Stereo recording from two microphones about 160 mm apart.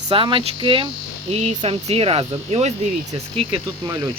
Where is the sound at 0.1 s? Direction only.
30° right (ahead or behind).